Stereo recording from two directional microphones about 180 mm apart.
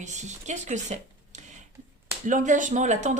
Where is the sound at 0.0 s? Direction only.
40° right (ahead or behind).